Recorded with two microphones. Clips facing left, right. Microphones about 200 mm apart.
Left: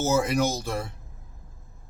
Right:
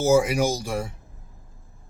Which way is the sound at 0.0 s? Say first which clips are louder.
Right 4 dB; 10° right (ahead or behind).